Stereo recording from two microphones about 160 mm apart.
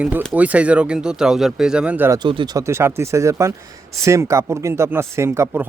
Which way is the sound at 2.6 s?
15° right (ahead or behind).